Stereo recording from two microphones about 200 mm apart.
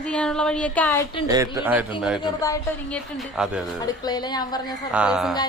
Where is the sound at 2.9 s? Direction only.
Centre (ahead or behind).